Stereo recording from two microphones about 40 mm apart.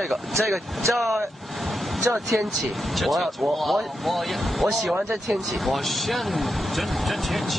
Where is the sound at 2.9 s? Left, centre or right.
Centre.